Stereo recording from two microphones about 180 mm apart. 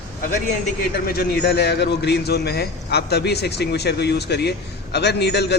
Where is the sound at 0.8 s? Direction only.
55° left (ahead or behind).